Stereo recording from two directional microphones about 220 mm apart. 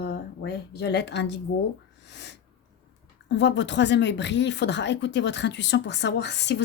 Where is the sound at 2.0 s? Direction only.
50° left (ahead or behind).